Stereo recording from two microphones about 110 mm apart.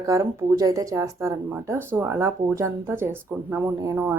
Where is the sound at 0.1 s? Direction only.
30° right (ahead or behind).